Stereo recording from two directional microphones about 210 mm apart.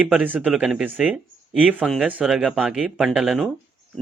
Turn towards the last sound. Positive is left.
turn(degrees=0)  # may be behind; listen again after turning